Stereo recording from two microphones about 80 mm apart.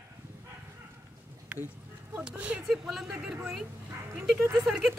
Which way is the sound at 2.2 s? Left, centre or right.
Centre.